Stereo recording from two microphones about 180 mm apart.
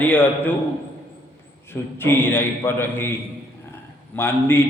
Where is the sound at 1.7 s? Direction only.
10° left (ahead or behind).